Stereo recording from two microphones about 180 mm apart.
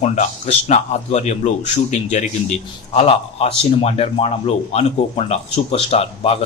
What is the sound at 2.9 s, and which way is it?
A man's voice, 35° left (ahead or behind).